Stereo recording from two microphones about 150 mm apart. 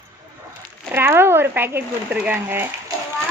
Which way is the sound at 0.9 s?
15° right (ahead or behind).